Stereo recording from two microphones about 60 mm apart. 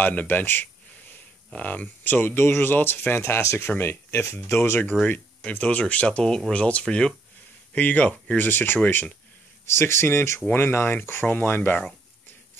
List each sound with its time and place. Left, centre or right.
0.0 s a sound: left
1.5 s speech: left
5.0 s speech: left
7.7 s speech: left
9.7 s a man's voice: left